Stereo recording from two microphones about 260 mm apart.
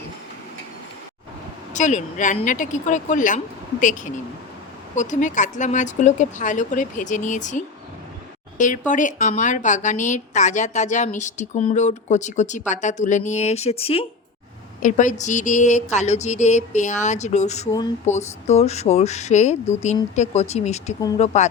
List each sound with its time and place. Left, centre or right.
1.7 s a woman's voice: left
4.9 s a woman's voice: left
21.0 s speech: centre